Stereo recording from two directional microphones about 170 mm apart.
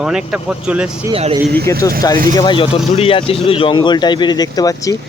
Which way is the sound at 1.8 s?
20° left (ahead or behind).